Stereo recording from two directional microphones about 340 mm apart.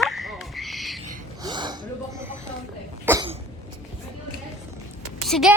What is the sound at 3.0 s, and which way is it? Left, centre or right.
Cough, centre.